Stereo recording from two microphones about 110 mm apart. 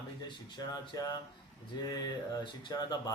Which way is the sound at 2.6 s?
35° left (ahead or behind).